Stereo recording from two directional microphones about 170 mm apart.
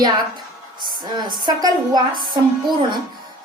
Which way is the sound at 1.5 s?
25° right (ahead or behind).